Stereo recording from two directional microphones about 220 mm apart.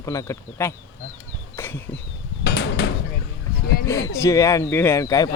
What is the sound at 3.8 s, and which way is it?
Speech, 15° left (ahead or behind).